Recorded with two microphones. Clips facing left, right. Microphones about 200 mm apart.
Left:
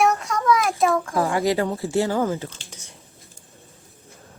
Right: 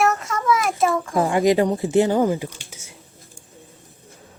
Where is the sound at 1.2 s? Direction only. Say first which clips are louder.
Right 6 dB; 15° right (ahead or behind).